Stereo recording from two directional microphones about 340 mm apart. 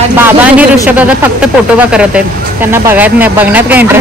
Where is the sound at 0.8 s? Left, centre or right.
Centre.